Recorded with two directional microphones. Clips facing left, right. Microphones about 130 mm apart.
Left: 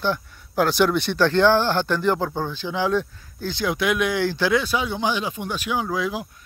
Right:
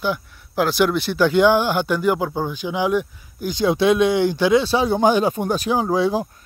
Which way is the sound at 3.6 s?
25° right (ahead or behind).